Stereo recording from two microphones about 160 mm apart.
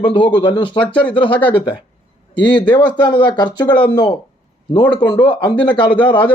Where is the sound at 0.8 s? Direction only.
10° left (ahead or behind).